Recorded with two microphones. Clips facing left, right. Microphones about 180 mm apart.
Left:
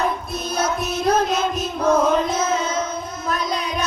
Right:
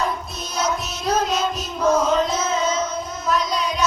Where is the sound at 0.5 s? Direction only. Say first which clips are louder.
Left 2 dB; 55° left (ahead or behind).